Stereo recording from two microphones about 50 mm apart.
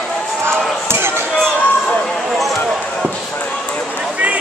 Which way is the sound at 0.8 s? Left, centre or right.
Right.